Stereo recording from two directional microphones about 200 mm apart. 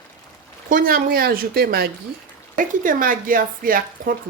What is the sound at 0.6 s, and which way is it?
Speech, 45° right (ahead or behind).